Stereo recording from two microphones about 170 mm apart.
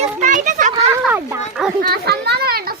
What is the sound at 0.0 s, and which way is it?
Children playing, 50° right (ahead or behind).